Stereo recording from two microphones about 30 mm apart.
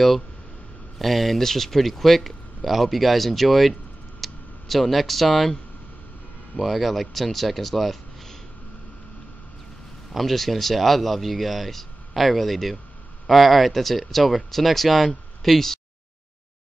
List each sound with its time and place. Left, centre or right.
0.9 s speech: centre
4.2 s a sound: centre
6.6 s speech: centre
10.1 s speech: centre